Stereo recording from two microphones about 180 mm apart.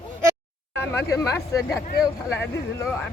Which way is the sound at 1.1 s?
15° left (ahead or behind).